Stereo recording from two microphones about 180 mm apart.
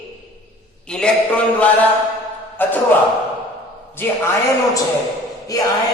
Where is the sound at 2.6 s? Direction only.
10° left (ahead or behind).